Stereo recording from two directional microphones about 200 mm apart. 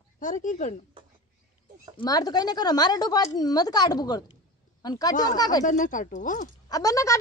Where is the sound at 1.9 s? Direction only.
20° left (ahead or behind).